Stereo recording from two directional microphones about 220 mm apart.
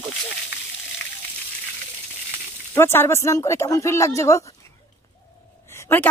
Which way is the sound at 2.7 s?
10° left (ahead or behind).